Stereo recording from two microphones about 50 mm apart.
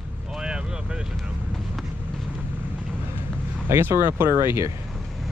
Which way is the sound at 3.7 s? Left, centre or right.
Right.